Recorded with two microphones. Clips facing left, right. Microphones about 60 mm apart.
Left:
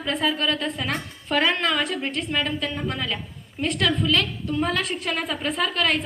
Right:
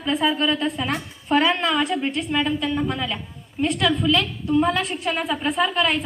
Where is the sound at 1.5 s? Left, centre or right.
Centre.